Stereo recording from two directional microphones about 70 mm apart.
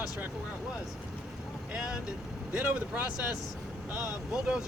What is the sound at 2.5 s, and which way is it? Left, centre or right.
Speech, right.